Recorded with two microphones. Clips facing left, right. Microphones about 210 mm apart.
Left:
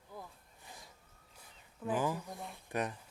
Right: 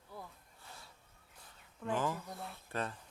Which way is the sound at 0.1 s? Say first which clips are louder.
Left 1 dB; 15° left (ahead or behind).